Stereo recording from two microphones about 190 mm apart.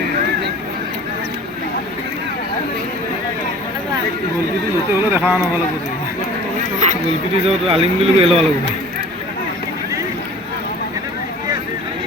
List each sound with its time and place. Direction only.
4.9 s speech: 10° right (ahead or behind)
6.7 s chatter: 40° right (ahead or behind)
7.4 s speech: 30° right (ahead or behind)